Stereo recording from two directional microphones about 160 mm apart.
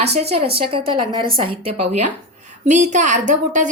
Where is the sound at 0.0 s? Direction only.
40° right (ahead or behind).